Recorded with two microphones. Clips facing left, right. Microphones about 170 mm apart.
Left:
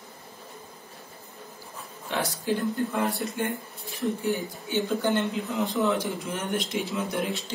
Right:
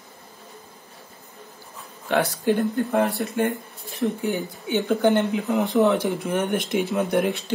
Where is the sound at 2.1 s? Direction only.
60° right (ahead or behind).